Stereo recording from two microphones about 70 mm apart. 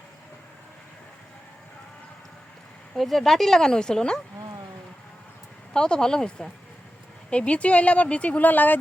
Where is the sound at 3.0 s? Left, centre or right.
Centre.